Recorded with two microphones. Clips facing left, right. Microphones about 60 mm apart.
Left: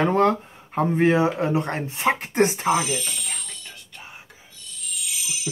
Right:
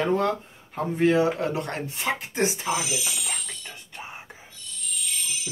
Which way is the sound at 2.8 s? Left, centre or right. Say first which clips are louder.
Left 2 dB; centre.